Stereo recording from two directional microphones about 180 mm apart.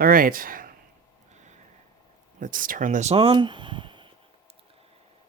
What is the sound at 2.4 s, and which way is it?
Speech, 50° right (ahead or behind).